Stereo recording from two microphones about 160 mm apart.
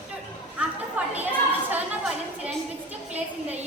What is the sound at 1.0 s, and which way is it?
Chatter, 10° right (ahead or behind).